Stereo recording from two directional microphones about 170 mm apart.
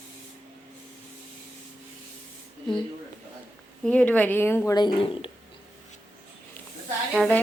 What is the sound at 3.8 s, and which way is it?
Speech, 10° left (ahead or behind).